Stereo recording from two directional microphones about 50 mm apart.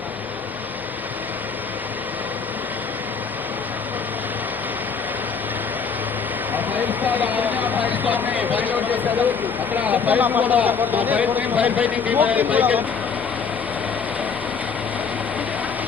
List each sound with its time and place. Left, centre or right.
6.5 s speech: right